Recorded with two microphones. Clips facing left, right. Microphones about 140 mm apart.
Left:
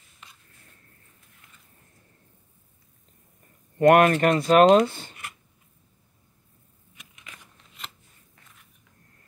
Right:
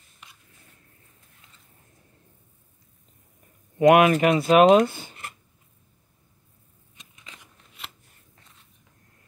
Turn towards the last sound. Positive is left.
turn(degrees=-5)  # may be behind; listen again after turning